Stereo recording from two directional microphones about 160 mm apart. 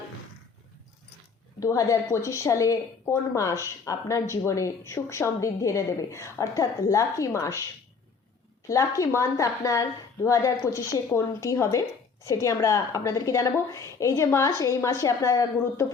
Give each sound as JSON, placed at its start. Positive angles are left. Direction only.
{"t": 1.5, "sound": "a woman's voice", "side_deg": 20}
{"t": 8.6, "sound": "a woman's voice", "side_deg": 20}